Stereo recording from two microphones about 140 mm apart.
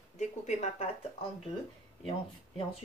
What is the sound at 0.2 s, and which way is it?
Speech, 55° left (ahead or behind).